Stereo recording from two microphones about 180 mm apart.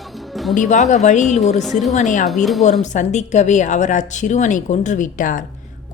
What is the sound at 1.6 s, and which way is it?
Speech, centre (ahead or behind).